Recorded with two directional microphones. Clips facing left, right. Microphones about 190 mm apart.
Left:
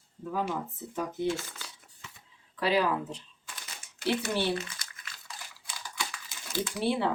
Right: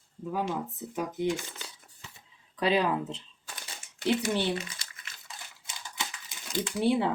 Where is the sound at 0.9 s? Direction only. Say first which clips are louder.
Right 1 dB; 15° right (ahead or behind).